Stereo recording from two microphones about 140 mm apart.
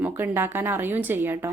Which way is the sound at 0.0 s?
15° right (ahead or behind).